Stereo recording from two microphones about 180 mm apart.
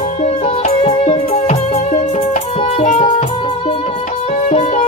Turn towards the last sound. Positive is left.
turn(degrees=40)  # may be behind; listen again after turning